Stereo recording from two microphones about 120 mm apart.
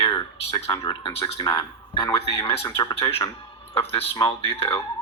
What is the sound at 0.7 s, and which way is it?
Speech, 40° left (ahead or behind).